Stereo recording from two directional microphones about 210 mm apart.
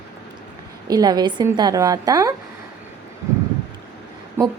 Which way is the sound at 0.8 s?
20° right (ahead or behind).